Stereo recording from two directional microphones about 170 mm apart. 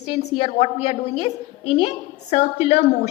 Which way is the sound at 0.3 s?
35° left (ahead or behind).